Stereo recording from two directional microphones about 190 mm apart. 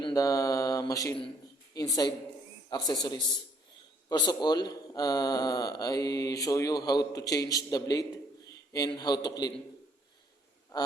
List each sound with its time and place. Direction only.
0.0 s mantra: 20° left (ahead or behind)
1.7 s speech: 20° left (ahead or behind)
10.7 s speech: 20° left (ahead or behind)